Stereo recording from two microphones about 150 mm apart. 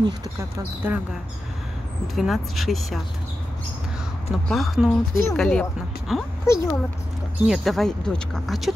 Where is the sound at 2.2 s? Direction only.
Centre (ahead or behind).